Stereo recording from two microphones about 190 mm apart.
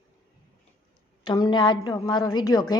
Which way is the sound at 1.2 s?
25° left (ahead or behind).